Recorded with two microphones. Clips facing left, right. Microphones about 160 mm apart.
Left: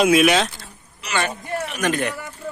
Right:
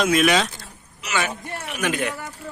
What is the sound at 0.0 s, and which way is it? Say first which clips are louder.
A man's voice: left 3 dB; 5° left (ahead or behind).